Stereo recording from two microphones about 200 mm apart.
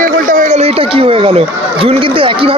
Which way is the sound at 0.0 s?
40° right (ahead or behind).